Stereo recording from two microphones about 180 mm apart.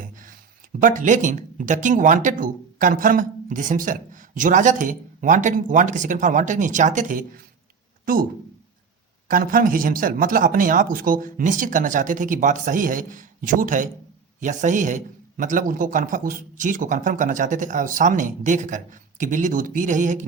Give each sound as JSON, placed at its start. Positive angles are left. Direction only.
{"t": 0.8, "sound": "speech", "side_deg": -45}
{"t": 9.3, "sound": "speech", "side_deg": -50}